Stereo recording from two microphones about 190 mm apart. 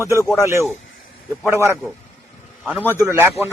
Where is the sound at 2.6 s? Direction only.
10° right (ahead or behind).